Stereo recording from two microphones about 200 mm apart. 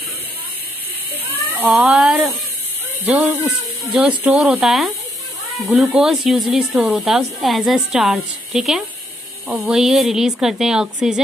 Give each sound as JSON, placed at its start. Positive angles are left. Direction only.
{"t": 1.1, "sound": "cat", "side_deg": 10}
{"t": 1.6, "sound": "a woman's voice", "side_deg": -5}
{"t": 3.3, "sound": "a woman's voice", "side_deg": -10}